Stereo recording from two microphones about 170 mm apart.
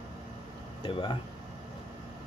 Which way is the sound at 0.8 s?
30° left (ahead or behind).